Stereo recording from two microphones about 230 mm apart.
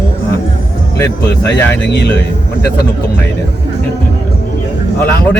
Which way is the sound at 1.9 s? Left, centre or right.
Left.